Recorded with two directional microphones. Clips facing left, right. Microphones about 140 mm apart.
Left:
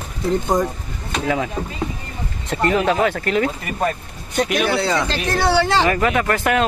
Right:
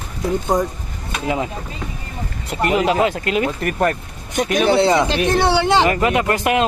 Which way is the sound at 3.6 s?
70° right (ahead or behind).